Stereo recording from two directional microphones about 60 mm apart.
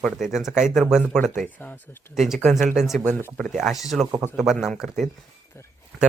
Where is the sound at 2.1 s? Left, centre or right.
Centre.